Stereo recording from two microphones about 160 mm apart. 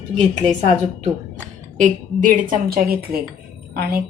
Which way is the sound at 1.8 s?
50° right (ahead or behind).